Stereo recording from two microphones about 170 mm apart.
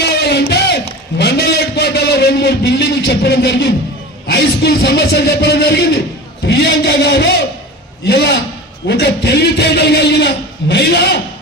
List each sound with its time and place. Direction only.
0.2 s music: 75° left (ahead or behind)
1.2 s a man's voice: 75° left (ahead or behind)